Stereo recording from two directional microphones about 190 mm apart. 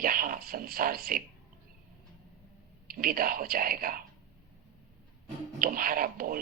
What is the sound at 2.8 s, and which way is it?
A man's voice, 50° right (ahead or behind).